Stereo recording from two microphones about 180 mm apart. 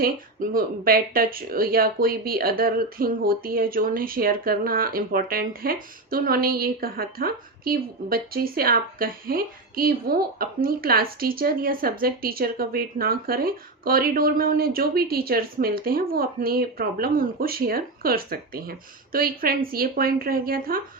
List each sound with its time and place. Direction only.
0.0 s speech: 55° right (ahead or behind)